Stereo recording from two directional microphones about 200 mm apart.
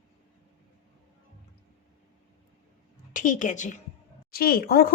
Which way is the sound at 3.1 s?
40° left (ahead or behind).